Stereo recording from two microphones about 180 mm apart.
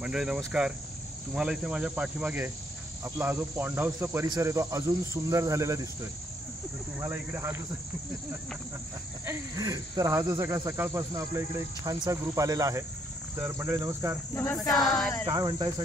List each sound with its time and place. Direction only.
0.0 s speech: 5° right (ahead or behind)
7.0 s speech: 15° right (ahead or behind)
9.2 s speech: 15° right (ahead or behind)
14.3 s speech: 10° left (ahead or behind)
14.7 s speech: centre (ahead or behind)
15.2 s speech: 25° right (ahead or behind)